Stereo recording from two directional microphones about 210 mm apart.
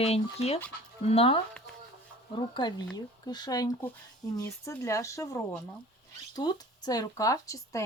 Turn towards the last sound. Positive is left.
turn(degrees=15)  # may be behind; listen again after turning